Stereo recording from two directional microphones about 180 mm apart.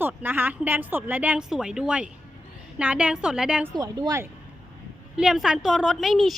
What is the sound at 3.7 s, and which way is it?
Speech, 25° right (ahead or behind).